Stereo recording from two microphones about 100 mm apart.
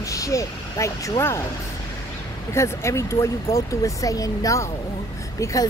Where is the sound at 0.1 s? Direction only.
30° left (ahead or behind).